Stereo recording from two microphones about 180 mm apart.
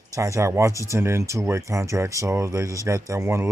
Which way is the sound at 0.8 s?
15° right (ahead or behind).